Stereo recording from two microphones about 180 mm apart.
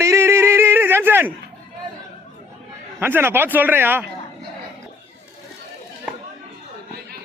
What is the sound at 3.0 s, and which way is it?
A man's voice, 10° right (ahead or behind).